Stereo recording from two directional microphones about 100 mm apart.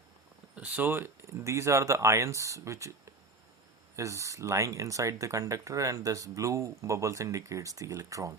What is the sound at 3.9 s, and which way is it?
Speech, 30° right (ahead or behind).